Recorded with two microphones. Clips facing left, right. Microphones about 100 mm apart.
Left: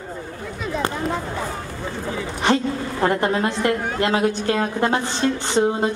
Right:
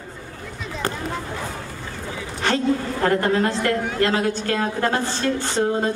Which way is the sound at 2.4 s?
20° left (ahead or behind).